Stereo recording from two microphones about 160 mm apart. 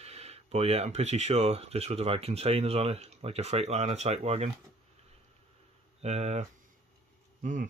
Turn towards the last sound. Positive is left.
turn(degrees=-55)  # may be behind; listen again after turning